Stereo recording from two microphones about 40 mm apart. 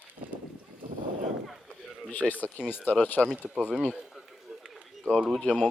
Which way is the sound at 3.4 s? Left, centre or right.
Right.